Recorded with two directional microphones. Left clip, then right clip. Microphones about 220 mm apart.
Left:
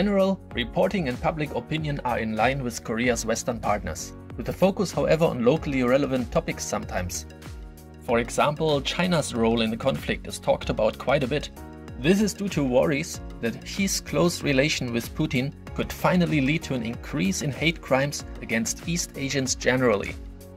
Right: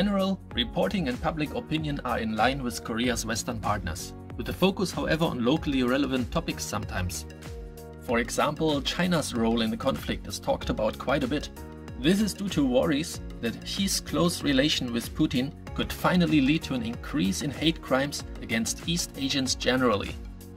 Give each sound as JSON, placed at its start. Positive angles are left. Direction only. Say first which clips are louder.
{"t": 0.0, "sound": "speech", "louder": "left 5 dB", "side_deg": 15}
{"t": 8.1, "sound": "speech", "louder": "left 3 dB", "side_deg": 15}